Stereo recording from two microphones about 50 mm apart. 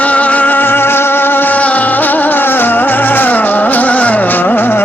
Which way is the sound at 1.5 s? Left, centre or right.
Left.